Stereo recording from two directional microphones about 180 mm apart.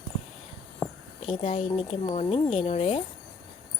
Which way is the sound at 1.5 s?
35° left (ahead or behind).